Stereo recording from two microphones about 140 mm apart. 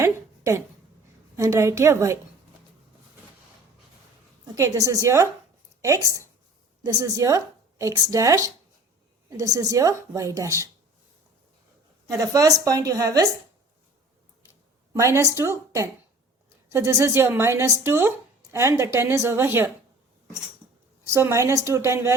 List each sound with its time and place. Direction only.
0.0 s a sound: 20° right (ahead or behind)
1.4 s speech: 20° right (ahead or behind)
4.5 s speech: 25° right (ahead or behind)
12.1 s speech: 25° right (ahead or behind)
14.9 s speech: 20° right (ahead or behind)
21.1 s speech: 20° right (ahead or behind)